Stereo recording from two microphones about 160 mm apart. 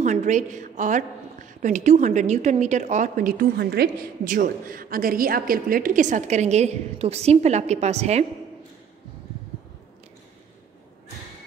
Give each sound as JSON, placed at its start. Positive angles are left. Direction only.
{"t": 0.0, "sound": "a woman's voice", "side_deg": -50}